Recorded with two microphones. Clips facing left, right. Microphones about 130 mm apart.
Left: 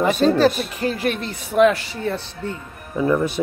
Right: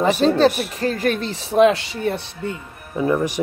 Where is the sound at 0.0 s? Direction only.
30° right (ahead or behind).